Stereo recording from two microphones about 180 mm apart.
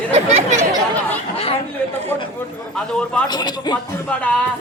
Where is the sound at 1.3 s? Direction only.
35° left (ahead or behind).